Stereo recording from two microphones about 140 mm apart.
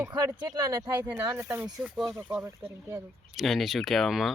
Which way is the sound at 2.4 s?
25° right (ahead or behind).